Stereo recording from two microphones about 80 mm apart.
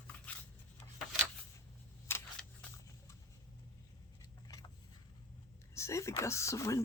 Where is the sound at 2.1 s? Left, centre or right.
Left.